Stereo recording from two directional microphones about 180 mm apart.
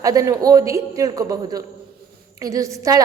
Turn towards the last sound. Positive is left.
turn(degrees=-20)  # may be behind; listen again after turning